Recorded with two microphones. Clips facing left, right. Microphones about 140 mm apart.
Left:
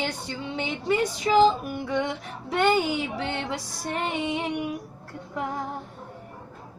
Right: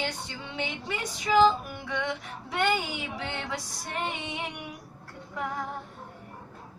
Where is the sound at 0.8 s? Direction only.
35° left (ahead or behind).